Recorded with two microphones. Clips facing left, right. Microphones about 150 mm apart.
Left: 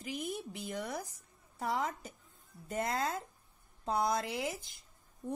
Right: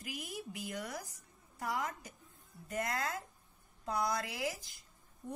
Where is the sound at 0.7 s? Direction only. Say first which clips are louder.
Left 3 dB; 25° left (ahead or behind).